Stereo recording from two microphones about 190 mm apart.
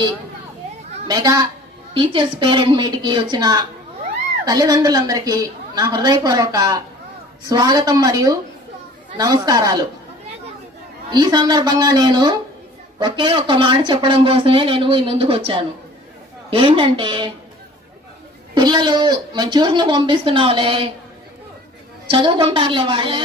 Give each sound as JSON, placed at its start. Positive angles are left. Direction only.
{"t": 1.0, "sound": "a woman's voice", "side_deg": -20}
{"t": 11.1, "sound": "speech", "side_deg": -20}
{"t": 18.5, "sound": "speech", "side_deg": -20}
{"t": 22.1, "sound": "speech", "side_deg": -25}